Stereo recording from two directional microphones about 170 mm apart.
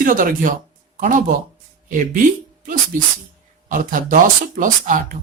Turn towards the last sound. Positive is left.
turn(degrees=-50)  # may be behind; listen again after turning